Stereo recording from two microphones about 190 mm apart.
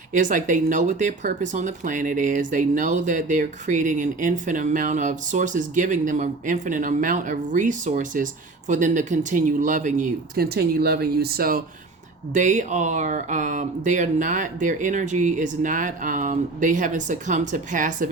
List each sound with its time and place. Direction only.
0.1 s speech: 40° right (ahead or behind)